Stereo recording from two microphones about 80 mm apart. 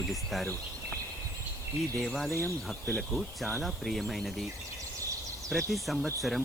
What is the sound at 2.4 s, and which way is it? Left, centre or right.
Speech, left.